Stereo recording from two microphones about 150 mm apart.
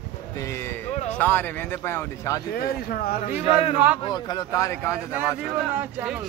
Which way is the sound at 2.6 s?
85° left.